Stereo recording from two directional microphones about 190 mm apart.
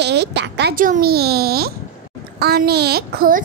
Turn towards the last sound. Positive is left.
turn(degrees=-50)  # may be behind; listen again after turning